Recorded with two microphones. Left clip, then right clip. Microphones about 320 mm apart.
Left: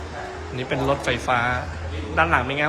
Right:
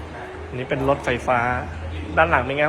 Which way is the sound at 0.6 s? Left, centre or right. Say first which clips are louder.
Right 2 dB; centre.